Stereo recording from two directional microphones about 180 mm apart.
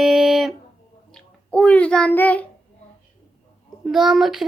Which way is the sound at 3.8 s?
Centre (ahead or behind).